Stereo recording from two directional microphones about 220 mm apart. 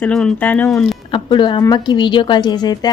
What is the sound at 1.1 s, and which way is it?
A woman's voice, 20° left (ahead or behind).